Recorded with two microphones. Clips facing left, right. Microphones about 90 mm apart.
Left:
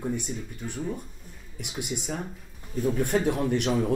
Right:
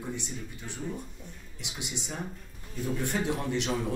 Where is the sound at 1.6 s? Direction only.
50° left (ahead or behind).